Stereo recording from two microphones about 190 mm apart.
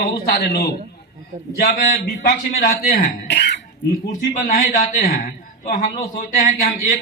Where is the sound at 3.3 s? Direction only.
65° left (ahead or behind).